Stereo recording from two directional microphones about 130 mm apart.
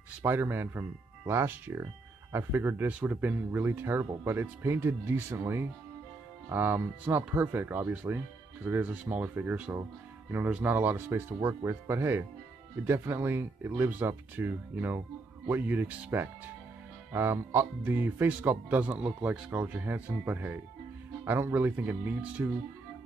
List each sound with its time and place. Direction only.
0.2 s speech: 15° right (ahead or behind)